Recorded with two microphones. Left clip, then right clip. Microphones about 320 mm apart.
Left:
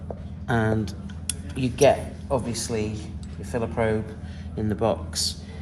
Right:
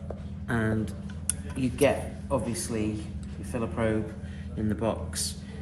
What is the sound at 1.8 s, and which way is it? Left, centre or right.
Speech, left.